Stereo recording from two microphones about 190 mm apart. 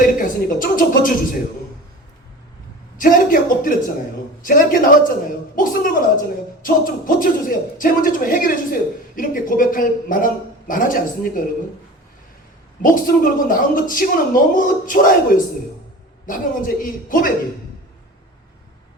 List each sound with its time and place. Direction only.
0.0 s a sound: 45° left (ahead or behind)
3.0 s a woman's voice: 45° left (ahead or behind)
12.8 s a woman's voice: 45° left (ahead or behind)